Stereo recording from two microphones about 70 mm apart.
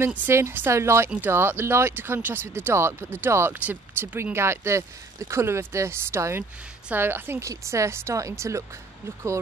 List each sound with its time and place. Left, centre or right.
0.3 s speech: right
7.4 s speech: right